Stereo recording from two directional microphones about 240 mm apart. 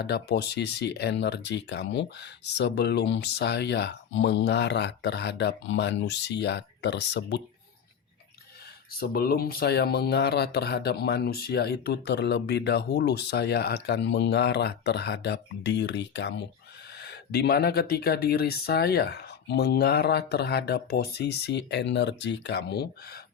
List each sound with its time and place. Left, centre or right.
0.0 s speech: left
8.9 s speech: left